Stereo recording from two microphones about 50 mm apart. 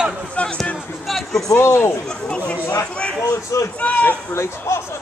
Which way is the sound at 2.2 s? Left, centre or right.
Left.